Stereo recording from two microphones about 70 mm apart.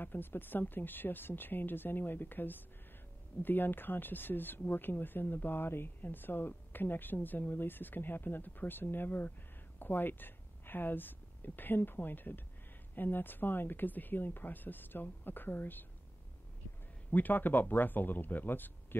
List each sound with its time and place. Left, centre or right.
0.0 s speech: left
17.1 s speech: left